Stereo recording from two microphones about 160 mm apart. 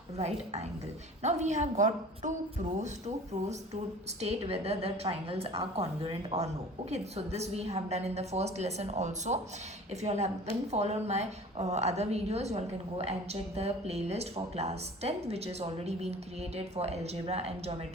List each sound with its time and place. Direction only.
0.2 s a woman's voice: 45° right (ahead or behind)
4.2 s a woman's voice: 40° right (ahead or behind)